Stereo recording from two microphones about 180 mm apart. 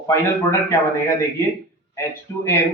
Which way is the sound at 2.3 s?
15° left (ahead or behind).